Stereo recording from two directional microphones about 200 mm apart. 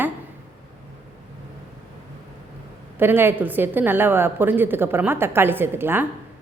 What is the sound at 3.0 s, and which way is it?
A woman's voice, 10° right (ahead or behind).